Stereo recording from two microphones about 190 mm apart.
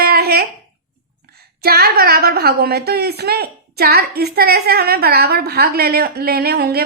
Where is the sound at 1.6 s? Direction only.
55° right (ahead or behind).